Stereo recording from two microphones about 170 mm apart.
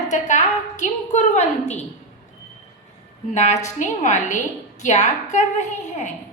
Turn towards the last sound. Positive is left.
turn(degrees=45)  # may be behind; listen again after turning